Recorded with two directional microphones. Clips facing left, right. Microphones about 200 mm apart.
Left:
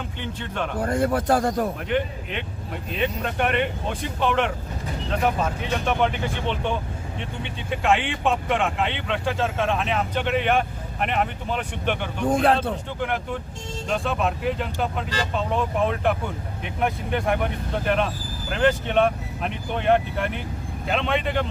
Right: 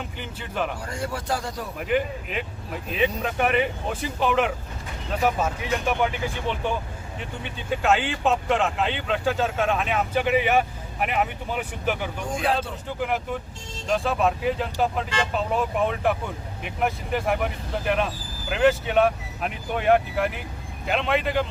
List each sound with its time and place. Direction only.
0.2 s speech: 5° right (ahead or behind)
0.8 s a man's voice: 55° left (ahead or behind)
1.9 s speech: 5° right (ahead or behind)
12.3 s a man's voice: 55° left (ahead or behind)
13.0 s speech: 5° right (ahead or behind)